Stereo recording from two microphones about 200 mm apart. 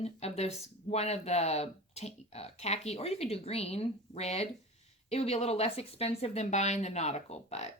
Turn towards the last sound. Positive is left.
turn(degrees=35)  # may be behind; listen again after turning